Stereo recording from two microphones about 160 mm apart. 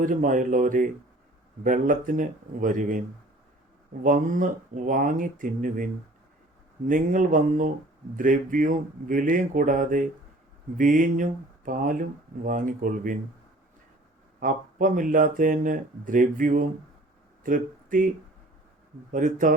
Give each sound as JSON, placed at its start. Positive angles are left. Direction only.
{"t": 0.0, "sound": "speech", "side_deg": -55}
{"t": 4.0, "sound": "speech", "side_deg": -55}
{"t": 14.3, "sound": "speech", "side_deg": -55}
{"t": 19.1, "sound": "speech", "side_deg": -55}